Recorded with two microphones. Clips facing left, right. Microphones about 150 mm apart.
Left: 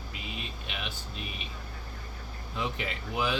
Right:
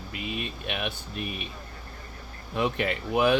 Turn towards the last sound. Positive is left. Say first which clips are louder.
# right 8 dB
turn(degrees=-60)  # may be behind; listen again after turning